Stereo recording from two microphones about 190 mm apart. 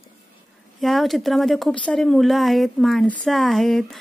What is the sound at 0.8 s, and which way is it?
A woman's voice, centre (ahead or behind).